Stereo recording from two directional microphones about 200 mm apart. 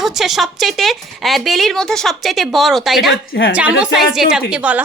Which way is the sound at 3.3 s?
55° left (ahead or behind).